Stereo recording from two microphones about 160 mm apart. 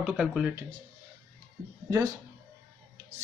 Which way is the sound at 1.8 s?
20° right (ahead or behind).